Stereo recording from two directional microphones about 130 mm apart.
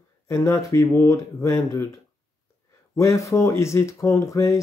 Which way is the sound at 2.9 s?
20° left (ahead or behind).